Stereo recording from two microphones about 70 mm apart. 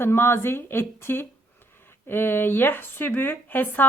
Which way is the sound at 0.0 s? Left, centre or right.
Left.